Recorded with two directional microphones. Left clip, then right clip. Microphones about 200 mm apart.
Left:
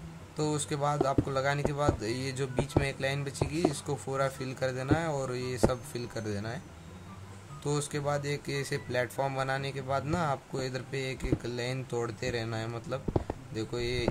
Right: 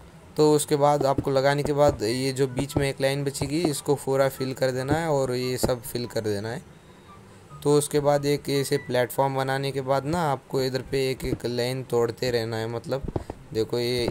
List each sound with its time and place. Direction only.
0.4 s speech: 25° right (ahead or behind)
7.6 s speech: 25° right (ahead or behind)